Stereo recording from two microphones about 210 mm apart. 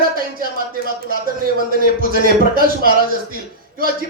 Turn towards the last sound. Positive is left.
turn(degrees=-45)  # may be behind; listen again after turning